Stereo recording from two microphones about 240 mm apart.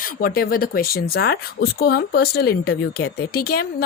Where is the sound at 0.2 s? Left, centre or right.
Left.